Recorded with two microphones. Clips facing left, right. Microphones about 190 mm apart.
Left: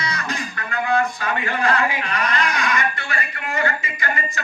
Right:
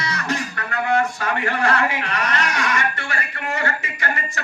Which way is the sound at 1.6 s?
70° right (ahead or behind).